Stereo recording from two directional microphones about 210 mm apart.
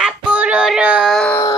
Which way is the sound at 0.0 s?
5° right (ahead or behind).